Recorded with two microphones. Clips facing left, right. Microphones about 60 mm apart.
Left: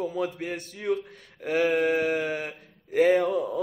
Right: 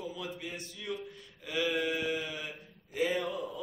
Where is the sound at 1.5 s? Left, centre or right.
Left.